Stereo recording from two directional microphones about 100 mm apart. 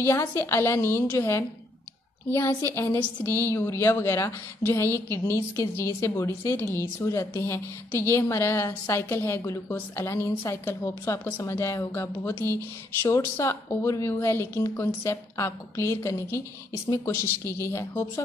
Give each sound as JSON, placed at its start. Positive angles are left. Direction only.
{"t": 0.0, "sound": "a woman's voice", "side_deg": 30}